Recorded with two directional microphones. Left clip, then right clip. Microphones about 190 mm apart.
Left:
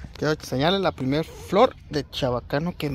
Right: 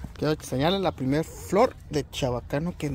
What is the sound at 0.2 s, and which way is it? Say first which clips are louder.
Speech: left 2 dB; 5° left (ahead or behind).